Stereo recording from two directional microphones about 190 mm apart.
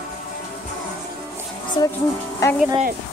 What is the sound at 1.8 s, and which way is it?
Speech, 20° left (ahead or behind).